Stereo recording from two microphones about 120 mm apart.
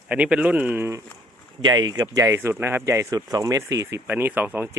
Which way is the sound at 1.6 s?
40° right (ahead or behind).